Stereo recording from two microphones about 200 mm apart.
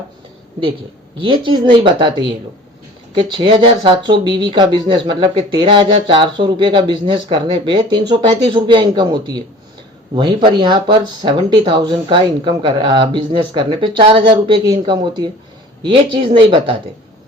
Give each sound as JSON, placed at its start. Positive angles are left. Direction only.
{"t": 1.2, "sound": "speech", "side_deg": -25}
{"t": 3.3, "sound": "speech", "side_deg": -25}